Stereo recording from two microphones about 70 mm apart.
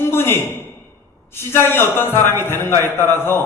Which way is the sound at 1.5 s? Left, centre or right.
Left.